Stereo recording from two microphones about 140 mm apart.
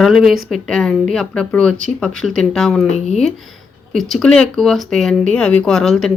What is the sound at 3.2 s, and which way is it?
Speech, centre (ahead or behind).